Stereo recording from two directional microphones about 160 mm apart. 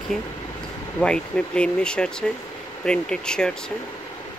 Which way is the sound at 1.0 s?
5° left (ahead or behind).